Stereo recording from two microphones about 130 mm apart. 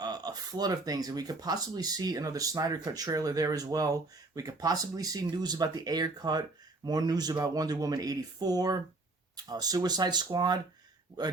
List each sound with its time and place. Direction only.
0.0 s speech: 30° right (ahead or behind)